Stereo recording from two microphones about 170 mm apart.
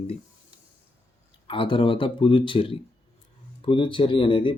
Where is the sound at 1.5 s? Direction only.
30° left (ahead or behind).